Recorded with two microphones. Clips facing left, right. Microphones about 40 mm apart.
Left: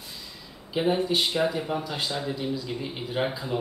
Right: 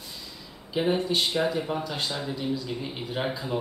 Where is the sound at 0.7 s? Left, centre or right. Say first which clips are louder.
Left 1 dB; centre.